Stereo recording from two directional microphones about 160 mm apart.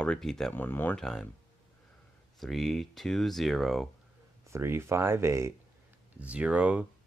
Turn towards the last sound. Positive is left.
turn(degrees=-5)  # may be behind; listen again after turning